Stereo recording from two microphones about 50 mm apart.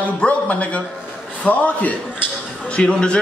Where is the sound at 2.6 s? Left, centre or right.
Centre.